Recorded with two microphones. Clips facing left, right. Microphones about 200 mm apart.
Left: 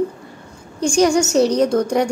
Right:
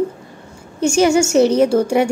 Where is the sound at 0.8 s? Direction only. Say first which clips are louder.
Right 2 dB; 5° right (ahead or behind).